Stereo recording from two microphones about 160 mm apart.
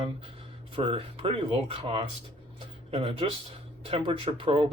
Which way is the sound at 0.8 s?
35° right (ahead or behind).